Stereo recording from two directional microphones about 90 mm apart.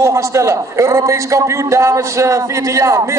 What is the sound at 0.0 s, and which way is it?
A man's voice, 35° right (ahead or behind).